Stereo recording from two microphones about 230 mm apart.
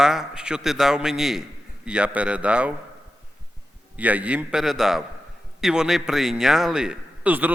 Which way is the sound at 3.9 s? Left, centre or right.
Centre.